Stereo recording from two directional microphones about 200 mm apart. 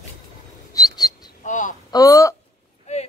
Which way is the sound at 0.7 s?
20° left (ahead or behind).